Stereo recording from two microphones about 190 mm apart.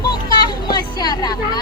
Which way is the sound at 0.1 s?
20° left (ahead or behind).